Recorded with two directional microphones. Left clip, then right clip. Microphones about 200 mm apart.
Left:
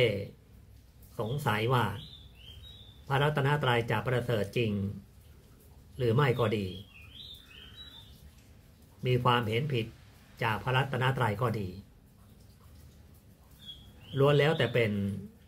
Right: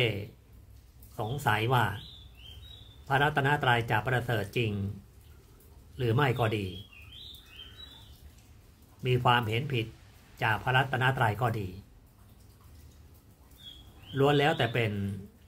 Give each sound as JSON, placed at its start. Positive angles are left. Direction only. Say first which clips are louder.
{"t": 0.0, "sound": "speech", "louder": "left 2 dB", "side_deg": -15}
{"t": 3.1, "sound": "speech", "louder": "right 3 dB", "side_deg": -15}
{"t": 5.9, "sound": "speech", "louder": "even", "side_deg": -15}
{"t": 9.0, "sound": "speech", "louder": "right 2 dB", "side_deg": -15}
{"t": 14.1, "sound": "speech", "louder": "even", "side_deg": -15}